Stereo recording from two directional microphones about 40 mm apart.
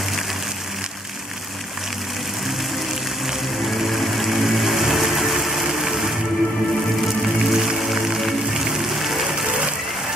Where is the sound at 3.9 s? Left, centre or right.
Centre.